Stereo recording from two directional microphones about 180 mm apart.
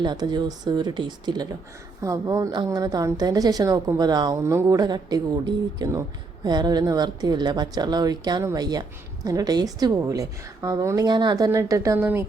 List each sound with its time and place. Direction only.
0.0 s a woman's voice: 25° right (ahead or behind)